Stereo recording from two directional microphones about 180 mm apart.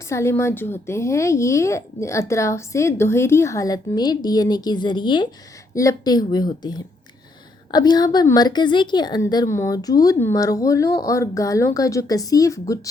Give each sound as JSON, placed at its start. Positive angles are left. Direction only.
{"t": 0.1, "sound": "a woman's voice", "side_deg": 15}